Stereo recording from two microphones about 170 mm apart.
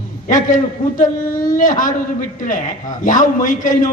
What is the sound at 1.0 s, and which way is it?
Speech, 50° left (ahead or behind).